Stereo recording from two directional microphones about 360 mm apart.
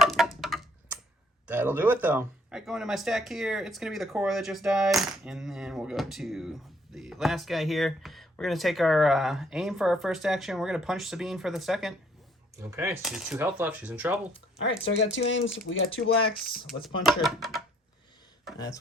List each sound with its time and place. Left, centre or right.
0.0 s typing: centre
1.5 s speech: centre
14.9 s speech: left
16.8 s speech: centre